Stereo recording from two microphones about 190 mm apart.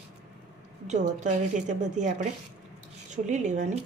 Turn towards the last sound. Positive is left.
turn(degrees=-40)  # may be behind; listen again after turning